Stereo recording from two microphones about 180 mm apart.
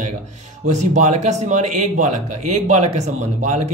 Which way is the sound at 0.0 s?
40° right (ahead or behind).